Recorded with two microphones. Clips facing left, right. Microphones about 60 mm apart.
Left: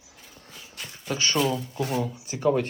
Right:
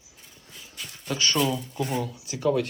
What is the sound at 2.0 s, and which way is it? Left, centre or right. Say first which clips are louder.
Speech: left 1 dB; left.